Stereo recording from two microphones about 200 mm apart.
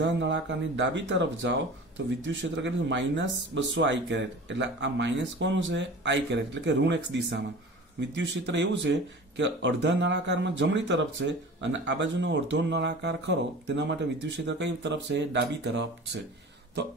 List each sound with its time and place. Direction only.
0.0 s speech: 65° right (ahead or behind)